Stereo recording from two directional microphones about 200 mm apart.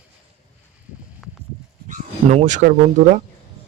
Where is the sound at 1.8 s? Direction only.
35° right (ahead or behind).